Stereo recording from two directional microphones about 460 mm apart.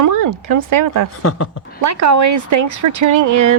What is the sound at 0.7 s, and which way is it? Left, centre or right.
Speech, right.